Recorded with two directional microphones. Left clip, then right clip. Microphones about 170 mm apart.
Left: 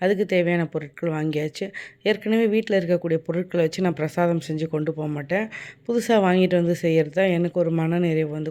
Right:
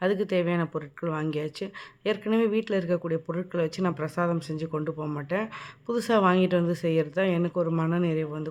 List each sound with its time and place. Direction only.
0.0 s speech: 15° left (ahead or behind)